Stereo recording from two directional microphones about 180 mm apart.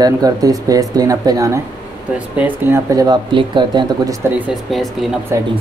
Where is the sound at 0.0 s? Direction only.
20° right (ahead or behind).